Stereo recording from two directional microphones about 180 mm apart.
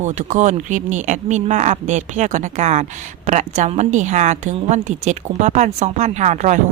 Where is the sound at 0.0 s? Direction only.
45° right (ahead or behind).